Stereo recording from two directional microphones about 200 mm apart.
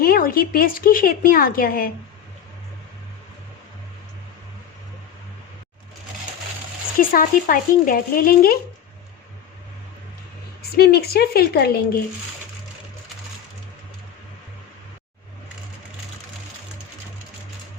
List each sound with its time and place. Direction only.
0.0 s a woman's voice: 45° left (ahead or behind)
7.1 s a woman's voice: 45° left (ahead or behind)
10.6 s a woman's voice: 50° left (ahead or behind)